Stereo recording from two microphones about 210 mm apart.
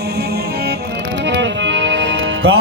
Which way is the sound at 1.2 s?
55° right (ahead or behind).